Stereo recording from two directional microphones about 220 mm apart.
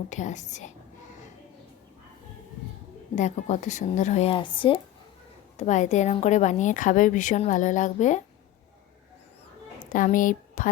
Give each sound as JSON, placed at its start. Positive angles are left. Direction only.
{"t": 0.1, "sound": "a woman's voice", "side_deg": 35}
{"t": 3.2, "sound": "a woman's voice", "side_deg": 35}
{"t": 5.5, "sound": "a woman's voice", "side_deg": 35}
{"t": 9.9, "sound": "a woman's voice", "side_deg": 35}